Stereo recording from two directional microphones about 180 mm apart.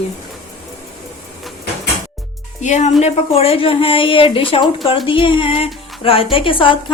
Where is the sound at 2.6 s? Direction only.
40° left (ahead or behind).